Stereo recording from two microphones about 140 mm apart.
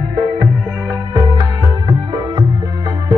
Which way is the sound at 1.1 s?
25° right (ahead or behind).